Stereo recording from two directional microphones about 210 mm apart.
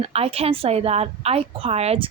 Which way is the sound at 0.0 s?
30° right (ahead or behind).